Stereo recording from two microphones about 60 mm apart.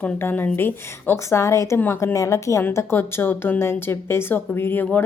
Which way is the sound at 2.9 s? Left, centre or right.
Left.